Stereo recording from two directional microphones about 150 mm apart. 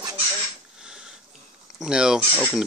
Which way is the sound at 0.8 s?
5° right (ahead or behind).